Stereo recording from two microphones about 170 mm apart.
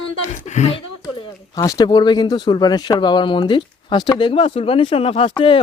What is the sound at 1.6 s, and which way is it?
Speech, 20° left (ahead or behind).